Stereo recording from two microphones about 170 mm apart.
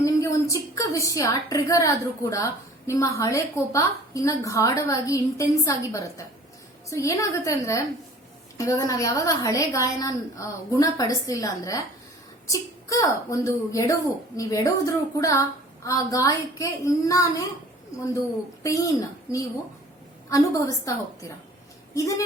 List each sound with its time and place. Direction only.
0.0 s a woman's voice: 20° left (ahead or behind)
18.6 s a woman's voice: 20° left (ahead or behind)